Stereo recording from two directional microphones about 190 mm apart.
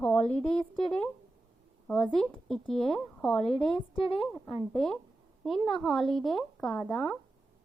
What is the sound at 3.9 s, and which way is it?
Speech, 25° left (ahead or behind).